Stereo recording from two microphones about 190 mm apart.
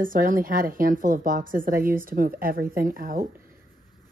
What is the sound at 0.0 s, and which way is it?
A woman's voice, 45° right (ahead or behind).